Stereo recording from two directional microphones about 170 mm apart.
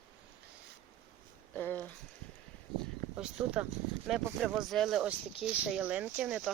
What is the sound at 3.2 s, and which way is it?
Speech, 5° right (ahead or behind).